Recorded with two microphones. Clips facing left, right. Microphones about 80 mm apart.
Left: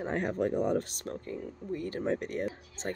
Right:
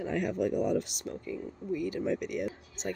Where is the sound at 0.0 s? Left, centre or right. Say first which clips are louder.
Even; left.